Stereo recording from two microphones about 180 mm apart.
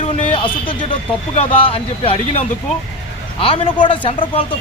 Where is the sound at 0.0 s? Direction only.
25° left (ahead or behind).